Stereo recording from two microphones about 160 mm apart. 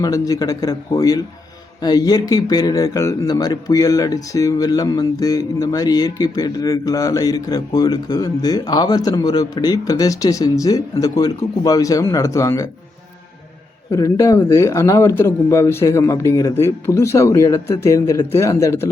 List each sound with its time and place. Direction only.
0.0 s speech: 25° left (ahead or behind)
13.9 s speech: 20° left (ahead or behind)